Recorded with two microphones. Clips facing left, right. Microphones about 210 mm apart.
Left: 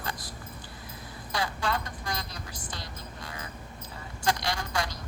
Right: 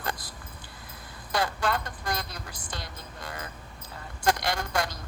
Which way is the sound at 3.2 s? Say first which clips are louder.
Right 4 dB; 55° right (ahead or behind).